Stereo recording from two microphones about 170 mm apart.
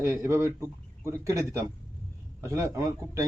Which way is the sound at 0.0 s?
15° right (ahead or behind).